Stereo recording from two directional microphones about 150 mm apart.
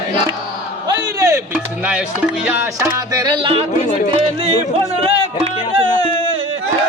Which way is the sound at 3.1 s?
30° right (ahead or behind).